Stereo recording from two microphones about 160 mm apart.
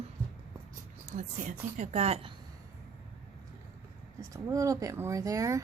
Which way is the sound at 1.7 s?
45° right (ahead or behind).